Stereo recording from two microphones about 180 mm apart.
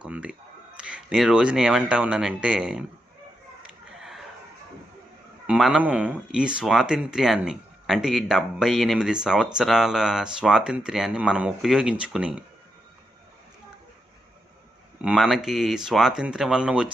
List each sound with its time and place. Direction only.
0.0 s speech: 5° right (ahead or behind)
3.7 s a sound: centre (ahead or behind)
5.5 s speech: 5° right (ahead or behind)
15.0 s speech: centre (ahead or behind)